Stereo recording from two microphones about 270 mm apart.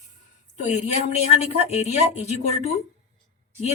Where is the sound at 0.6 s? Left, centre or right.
Left.